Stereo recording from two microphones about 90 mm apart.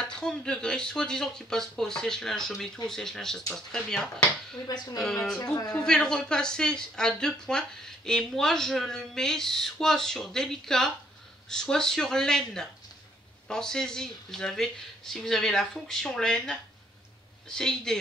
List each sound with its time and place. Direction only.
0.0 s speech: 10° left (ahead or behind)
4.6 s speech: 45° left (ahead or behind)
5.9 s speech: 10° left (ahead or behind)